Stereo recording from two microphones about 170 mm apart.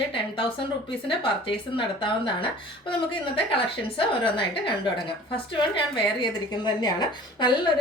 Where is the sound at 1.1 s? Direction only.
30° left (ahead or behind).